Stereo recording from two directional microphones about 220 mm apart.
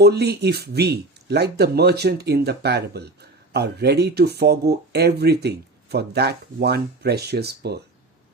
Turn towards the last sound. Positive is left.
turn(degrees=-50)  # may be behind; listen again after turning